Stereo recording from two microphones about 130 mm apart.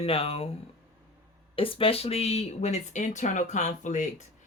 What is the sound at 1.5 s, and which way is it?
Speech, 45° left (ahead or behind).